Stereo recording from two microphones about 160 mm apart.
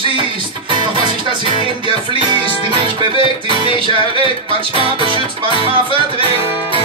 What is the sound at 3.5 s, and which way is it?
Music, 30° right (ahead or behind).